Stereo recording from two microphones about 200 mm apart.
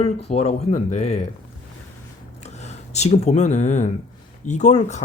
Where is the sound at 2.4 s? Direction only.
35° left (ahead or behind).